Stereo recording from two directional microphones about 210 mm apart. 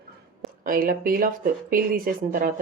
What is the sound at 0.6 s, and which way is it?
Speech, 45° right (ahead or behind).